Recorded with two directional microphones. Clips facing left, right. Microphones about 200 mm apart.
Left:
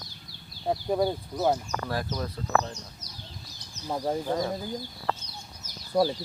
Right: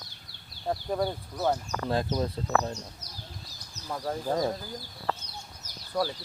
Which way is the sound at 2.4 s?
30° right (ahead or behind).